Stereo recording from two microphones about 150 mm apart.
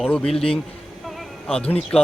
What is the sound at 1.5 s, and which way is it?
Speech, 5° left (ahead or behind).